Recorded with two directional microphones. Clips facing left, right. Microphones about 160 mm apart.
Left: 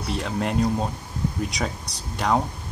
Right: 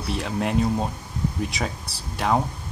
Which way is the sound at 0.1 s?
Centre (ahead or behind).